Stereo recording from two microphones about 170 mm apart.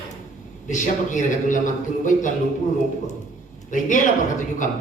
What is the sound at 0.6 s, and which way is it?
A man's voice, 45° left (ahead or behind).